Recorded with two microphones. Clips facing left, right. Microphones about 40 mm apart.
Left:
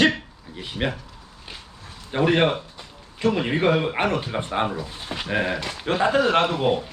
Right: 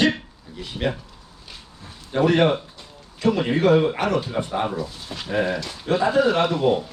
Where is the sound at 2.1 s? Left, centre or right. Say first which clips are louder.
Right 2 dB; left.